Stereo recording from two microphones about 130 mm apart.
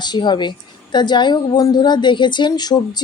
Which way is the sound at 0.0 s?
35° left (ahead or behind).